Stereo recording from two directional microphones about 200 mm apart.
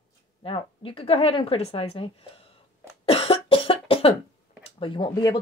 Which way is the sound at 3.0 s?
25° left (ahead or behind).